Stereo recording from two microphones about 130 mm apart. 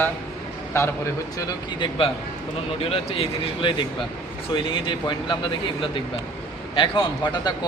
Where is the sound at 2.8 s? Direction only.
50° left (ahead or behind).